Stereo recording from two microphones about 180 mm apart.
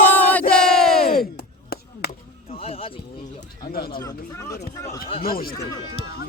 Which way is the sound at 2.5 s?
35° left (ahead or behind).